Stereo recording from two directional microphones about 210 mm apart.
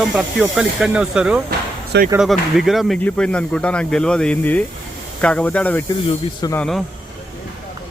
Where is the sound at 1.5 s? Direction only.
45° right (ahead or behind).